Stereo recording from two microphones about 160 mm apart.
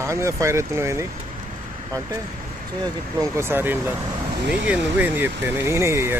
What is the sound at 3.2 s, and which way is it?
Speech, 15° right (ahead or behind).